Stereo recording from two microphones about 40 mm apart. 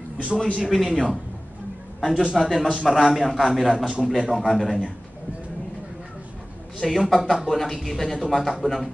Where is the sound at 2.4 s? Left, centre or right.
Centre.